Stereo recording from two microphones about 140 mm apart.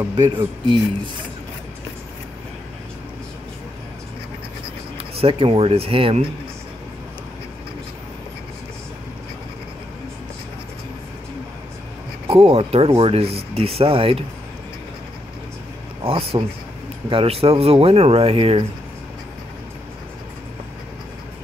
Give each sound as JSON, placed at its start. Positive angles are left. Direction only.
{"t": 0.1, "sound": "speech", "side_deg": -35}
{"t": 4.9, "sound": "speech", "side_deg": -45}
{"t": 12.3, "sound": "speech", "side_deg": -45}
{"t": 16.0, "sound": "speech", "side_deg": -45}